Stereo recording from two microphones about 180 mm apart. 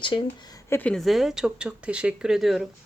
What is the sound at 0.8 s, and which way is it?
Speech, 5° left (ahead or behind).